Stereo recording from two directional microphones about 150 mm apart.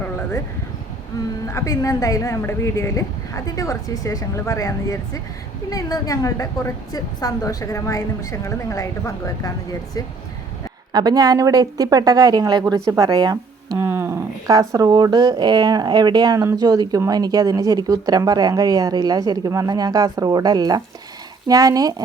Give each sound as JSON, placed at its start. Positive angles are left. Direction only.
{"t": 1.5, "sound": "a woman's voice", "side_deg": 20}
{"t": 10.9, "sound": "speech", "side_deg": -25}
{"t": 13.3, "sound": "speech", "side_deg": -20}